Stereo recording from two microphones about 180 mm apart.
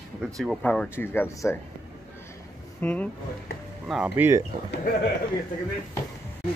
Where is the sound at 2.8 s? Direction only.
5° left (ahead or behind).